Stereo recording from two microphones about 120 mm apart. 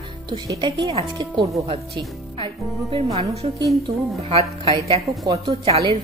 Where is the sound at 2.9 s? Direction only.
55° right (ahead or behind).